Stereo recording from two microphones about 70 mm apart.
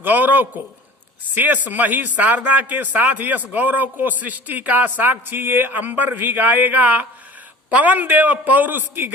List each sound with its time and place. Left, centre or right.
0.0 s speech: right